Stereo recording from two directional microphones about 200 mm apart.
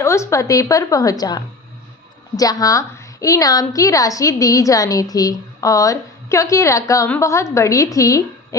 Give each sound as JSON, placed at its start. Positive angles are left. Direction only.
{"t": 0.0, "sound": "a woman's voice", "side_deg": 15}